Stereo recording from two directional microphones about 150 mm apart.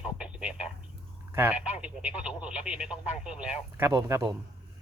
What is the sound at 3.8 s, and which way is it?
Speech, 20° right (ahead or behind).